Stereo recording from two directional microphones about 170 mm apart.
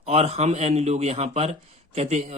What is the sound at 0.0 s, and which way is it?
Speech, 35° right (ahead or behind).